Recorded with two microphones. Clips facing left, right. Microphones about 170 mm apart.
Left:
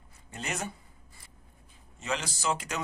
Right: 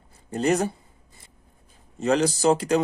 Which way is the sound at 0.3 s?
40° right (ahead or behind).